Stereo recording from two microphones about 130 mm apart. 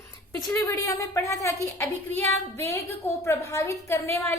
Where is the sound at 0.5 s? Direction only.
20° left (ahead or behind).